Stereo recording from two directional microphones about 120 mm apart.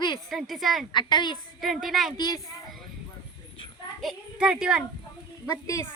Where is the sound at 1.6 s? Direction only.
Centre (ahead or behind).